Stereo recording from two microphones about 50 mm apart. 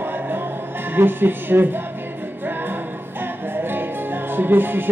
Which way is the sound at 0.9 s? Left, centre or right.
Right.